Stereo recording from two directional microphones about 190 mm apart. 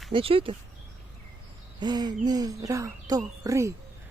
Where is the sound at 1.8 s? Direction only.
20° right (ahead or behind).